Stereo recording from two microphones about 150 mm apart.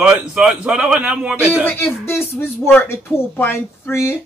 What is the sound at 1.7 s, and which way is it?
Speech, 15° left (ahead or behind).